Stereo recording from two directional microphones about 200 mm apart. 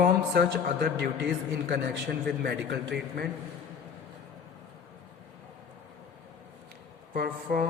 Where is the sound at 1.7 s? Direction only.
55° right (ahead or behind).